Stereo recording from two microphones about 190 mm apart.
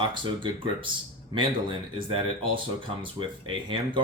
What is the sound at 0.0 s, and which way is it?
Speech, 25° right (ahead or behind).